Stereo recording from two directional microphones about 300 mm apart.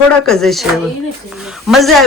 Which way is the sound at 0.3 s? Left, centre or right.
Centre.